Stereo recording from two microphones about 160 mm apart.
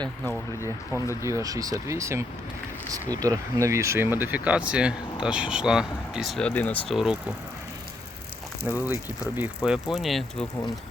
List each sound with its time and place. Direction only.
0.3 s speech: 20° left (ahead or behind)
1.2 s speech: 20° right (ahead or behind); by 6.9 s 10° left (ahead or behind)
6.9 s speech: 5° right (ahead or behind)
9.2 s speech: 10° right (ahead or behind)